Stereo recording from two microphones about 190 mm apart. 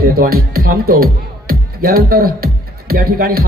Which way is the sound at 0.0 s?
50° right (ahead or behind).